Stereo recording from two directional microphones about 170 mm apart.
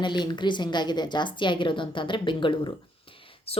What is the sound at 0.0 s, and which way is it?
Speech, 25° left (ahead or behind).